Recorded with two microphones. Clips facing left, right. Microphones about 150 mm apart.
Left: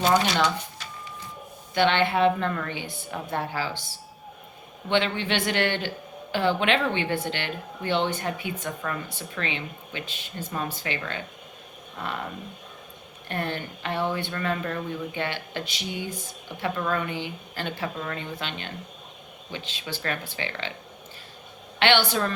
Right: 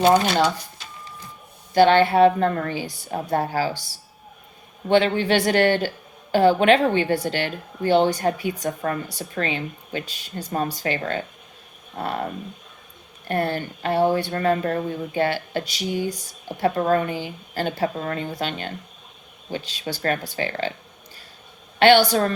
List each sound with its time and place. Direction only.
0.0 s speech: 55° right (ahead or behind)
0.3 s speech: 35° right (ahead or behind)
1.7 s speech: 40° right (ahead or behind)
4.9 s speech: 40° right (ahead or behind)
21.8 s speech: 40° right (ahead or behind)